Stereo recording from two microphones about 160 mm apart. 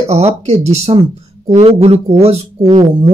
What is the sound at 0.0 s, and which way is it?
Speech, 40° right (ahead or behind).